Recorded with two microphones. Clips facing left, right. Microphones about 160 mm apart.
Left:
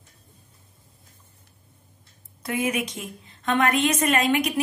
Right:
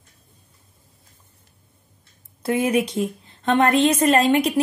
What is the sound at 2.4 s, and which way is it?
A woman's voice, 30° right (ahead or behind).